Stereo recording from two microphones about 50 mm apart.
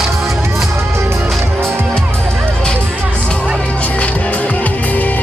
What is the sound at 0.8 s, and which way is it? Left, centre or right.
Music, right.